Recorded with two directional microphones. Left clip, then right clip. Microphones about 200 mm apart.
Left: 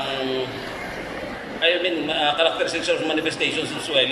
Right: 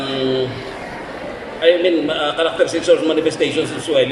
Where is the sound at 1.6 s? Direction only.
45° right (ahead or behind).